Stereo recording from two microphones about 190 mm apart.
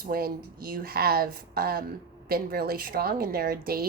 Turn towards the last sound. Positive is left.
turn(degrees=-55)  # may be behind; listen again after turning